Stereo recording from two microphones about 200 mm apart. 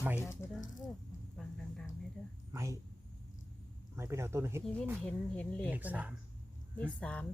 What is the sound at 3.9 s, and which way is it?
Speech, 15° right (ahead or behind).